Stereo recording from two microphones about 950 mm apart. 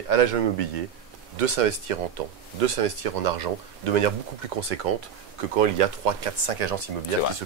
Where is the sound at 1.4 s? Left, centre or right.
Right.